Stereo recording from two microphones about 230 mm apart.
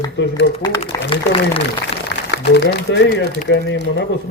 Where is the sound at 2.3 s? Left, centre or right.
Left.